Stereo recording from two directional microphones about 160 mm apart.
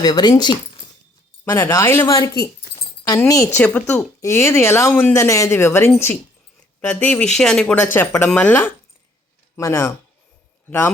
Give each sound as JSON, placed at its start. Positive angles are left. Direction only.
{"t": 0.0, "sound": "speech", "side_deg": 25}
{"t": 1.5, "sound": "speech", "side_deg": 15}